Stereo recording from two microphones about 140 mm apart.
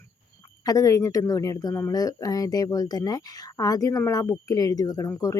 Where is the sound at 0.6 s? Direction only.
25° left (ahead or behind).